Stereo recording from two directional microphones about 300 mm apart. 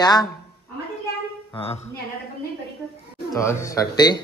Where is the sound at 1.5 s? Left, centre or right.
Centre.